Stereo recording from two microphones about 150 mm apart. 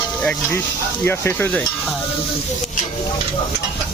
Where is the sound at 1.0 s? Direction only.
15° left (ahead or behind).